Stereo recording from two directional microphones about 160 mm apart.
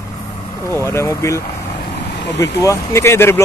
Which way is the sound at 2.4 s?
20° left (ahead or behind).